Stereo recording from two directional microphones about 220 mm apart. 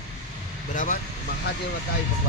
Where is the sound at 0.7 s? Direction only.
35° left (ahead or behind).